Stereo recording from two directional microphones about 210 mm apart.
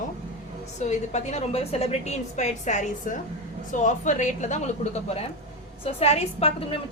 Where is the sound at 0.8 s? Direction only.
35° left (ahead or behind).